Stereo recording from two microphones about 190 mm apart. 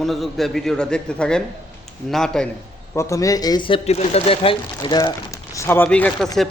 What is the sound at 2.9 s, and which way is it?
A man's voice, 15° left (ahead or behind).